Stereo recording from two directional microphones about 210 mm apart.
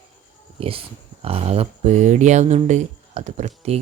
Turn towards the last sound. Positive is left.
turn(degrees=-30)  # may be behind; listen again after turning